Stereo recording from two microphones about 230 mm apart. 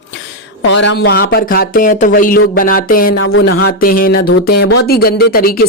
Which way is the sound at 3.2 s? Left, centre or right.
Left.